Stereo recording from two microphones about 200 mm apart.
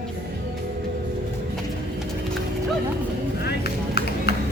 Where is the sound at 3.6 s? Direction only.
50° left (ahead or behind).